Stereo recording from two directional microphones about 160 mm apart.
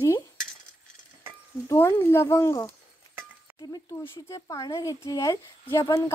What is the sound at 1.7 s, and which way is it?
Speech, 15° left (ahead or behind).